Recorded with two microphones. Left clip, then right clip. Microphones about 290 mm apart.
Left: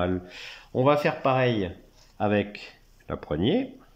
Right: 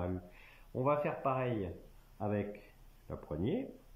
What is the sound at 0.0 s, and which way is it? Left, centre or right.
Speech, left.